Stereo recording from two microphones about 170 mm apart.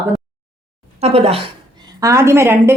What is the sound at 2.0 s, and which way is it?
Speech, 15° right (ahead or behind).